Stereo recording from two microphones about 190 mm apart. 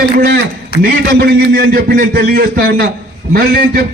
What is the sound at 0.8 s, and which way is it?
A man's voice, 55° right (ahead or behind).